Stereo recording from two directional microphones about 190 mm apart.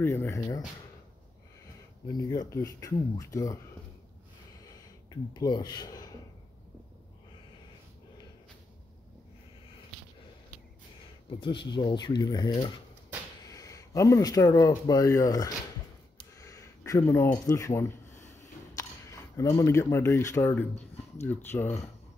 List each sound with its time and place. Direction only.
0.0 s speech: 10° left (ahead or behind)
2.3 s speech: 20° left (ahead or behind)
5.3 s speech: 20° left (ahead or behind)
11.2 s speech: 25° left (ahead or behind)
16.2 s a sound: 15° left (ahead or behind)
19.3 s speech: 15° left (ahead or behind)